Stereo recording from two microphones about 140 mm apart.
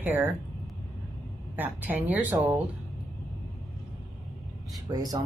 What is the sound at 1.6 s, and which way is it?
Speech, 10° right (ahead or behind).